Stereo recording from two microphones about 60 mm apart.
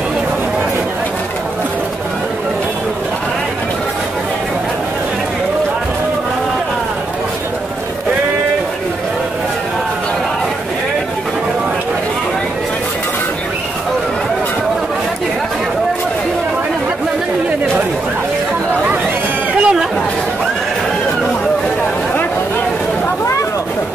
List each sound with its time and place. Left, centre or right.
19.6 s chatter: centre